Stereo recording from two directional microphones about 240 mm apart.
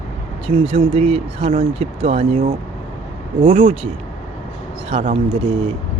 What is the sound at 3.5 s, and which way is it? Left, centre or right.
Speech, right.